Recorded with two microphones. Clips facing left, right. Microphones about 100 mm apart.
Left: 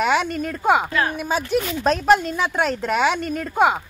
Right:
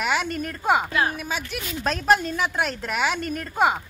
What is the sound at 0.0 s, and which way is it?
Speech, 20° left (ahead or behind).